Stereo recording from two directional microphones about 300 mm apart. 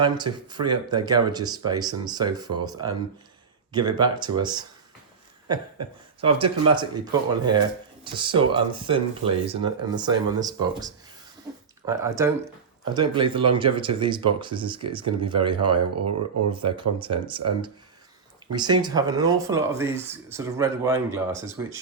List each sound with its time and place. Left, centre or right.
0.2 s speech: centre
6.2 s speech: centre